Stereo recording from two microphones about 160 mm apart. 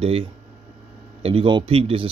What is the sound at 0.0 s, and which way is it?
Speech, 35° right (ahead or behind).